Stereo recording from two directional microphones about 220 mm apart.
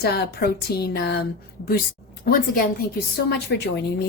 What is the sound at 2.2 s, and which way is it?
A woman's voice, 40° left (ahead or behind).